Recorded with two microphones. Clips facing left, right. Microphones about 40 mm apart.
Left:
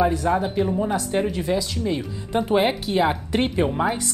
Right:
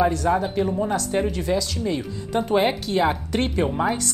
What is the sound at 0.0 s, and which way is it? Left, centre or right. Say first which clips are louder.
A woman's voice: even; centre.